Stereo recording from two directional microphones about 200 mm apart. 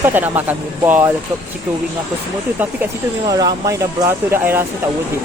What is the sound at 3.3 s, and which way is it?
Speech, 20° right (ahead or behind).